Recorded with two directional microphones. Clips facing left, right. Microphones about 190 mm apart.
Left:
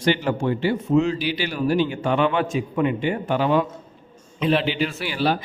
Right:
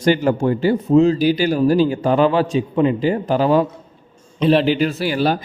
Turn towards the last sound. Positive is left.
turn(degrees=-45)  # may be behind; listen again after turning